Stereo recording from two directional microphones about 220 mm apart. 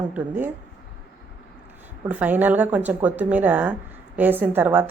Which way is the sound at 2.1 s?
5° right (ahead or behind).